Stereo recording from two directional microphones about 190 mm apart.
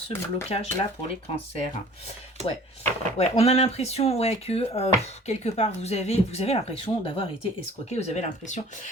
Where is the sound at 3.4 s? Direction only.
30° left (ahead or behind).